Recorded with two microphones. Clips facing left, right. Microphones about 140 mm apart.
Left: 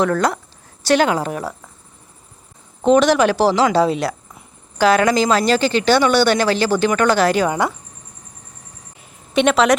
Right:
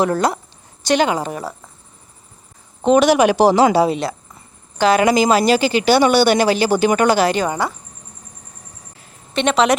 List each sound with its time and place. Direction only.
0.8 s a woman's voice: 5° left (ahead or behind)
1.4 s speech: 10° right (ahead or behind)
2.8 s speech: 5° right (ahead or behind)
3.9 s a sound: 5° left (ahead or behind)
4.9 s speech: 10° right (ahead or behind)
7.3 s speech: 5° left (ahead or behind)
9.3 s speech: 5° left (ahead or behind)